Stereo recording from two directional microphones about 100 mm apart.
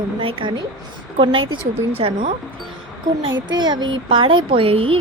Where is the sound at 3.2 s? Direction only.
50° right (ahead or behind); by 5.0 s 70° right (ahead or behind).